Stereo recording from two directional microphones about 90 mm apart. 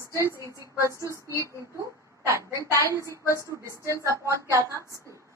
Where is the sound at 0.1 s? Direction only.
35° right (ahead or behind).